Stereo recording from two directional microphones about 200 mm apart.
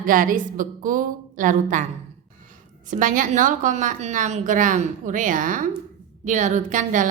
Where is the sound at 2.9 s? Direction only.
40° right (ahead or behind).